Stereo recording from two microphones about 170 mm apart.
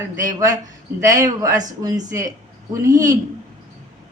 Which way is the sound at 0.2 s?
20° right (ahead or behind).